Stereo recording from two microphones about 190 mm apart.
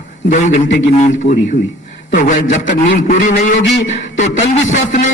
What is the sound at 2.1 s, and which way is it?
Speech, 40° left (ahead or behind).